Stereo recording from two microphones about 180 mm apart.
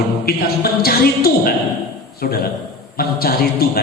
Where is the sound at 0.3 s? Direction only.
60° left (ahead or behind).